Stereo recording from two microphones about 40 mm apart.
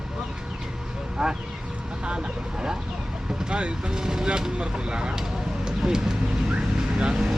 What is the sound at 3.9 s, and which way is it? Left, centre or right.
Speech, centre.